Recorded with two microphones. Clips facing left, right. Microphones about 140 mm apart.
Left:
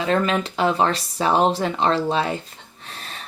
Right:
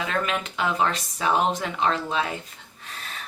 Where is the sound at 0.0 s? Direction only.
30° left (ahead or behind).